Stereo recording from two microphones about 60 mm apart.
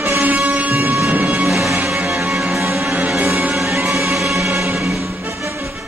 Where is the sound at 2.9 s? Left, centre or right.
Right.